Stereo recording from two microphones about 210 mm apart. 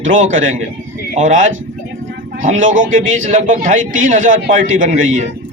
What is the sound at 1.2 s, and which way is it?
Speech, 35° right (ahead or behind).